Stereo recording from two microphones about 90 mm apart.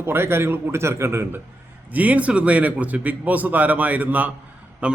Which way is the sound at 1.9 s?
15° right (ahead or behind).